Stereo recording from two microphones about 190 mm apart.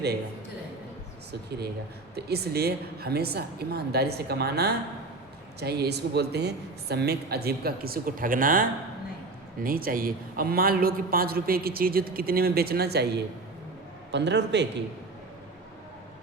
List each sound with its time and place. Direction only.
1.3 s a woman's voice: 60° right (ahead or behind)
9.6 s a man's voice: 50° right (ahead or behind); by 14.8 s 65° right (ahead or behind)